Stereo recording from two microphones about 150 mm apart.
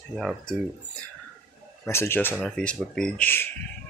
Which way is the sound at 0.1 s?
Centre (ahead or behind).